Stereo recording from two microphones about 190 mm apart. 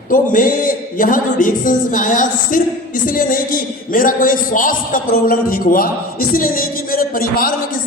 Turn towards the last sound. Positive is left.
turn(degrees=50)  # may be behind; listen again after turning